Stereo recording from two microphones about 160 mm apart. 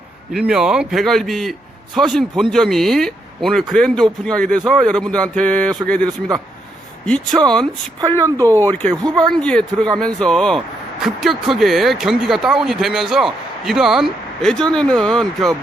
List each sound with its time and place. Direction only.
0.3 s speech: 5° right (ahead or behind)
7.4 s speech: 5° left (ahead or behind)
8.2 s speech: 20° right (ahead or behind)
8.6 s speech: 10° left (ahead or behind)